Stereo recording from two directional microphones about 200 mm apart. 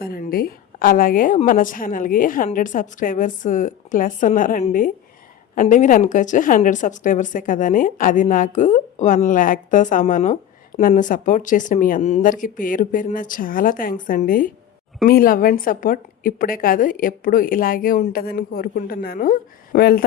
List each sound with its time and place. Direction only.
0.0 s a woman's voice: 50° left (ahead or behind)